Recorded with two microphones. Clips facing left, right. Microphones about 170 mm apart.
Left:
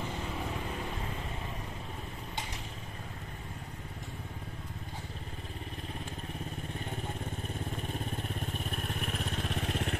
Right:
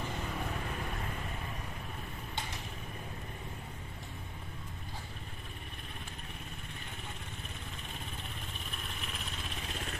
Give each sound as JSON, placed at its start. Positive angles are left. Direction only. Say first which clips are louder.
{"t": 8.2, "sound": "vehicle", "louder": "left 8 dB", "side_deg": 50}